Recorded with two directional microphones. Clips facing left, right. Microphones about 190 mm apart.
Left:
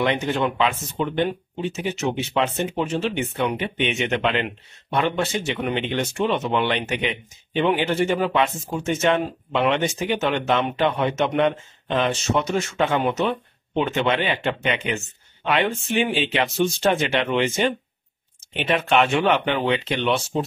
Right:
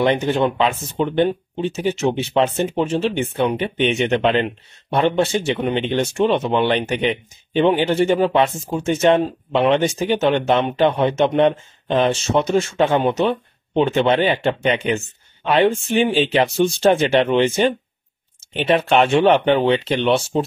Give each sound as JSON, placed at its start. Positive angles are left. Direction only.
{"t": 0.0, "sound": "speech", "side_deg": -30}